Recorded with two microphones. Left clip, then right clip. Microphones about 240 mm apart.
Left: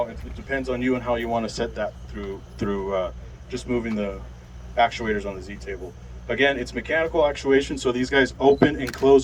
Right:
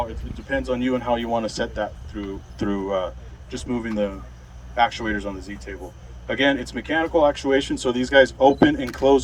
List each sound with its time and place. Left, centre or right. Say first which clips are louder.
0.5 s speech: right 1 dB; right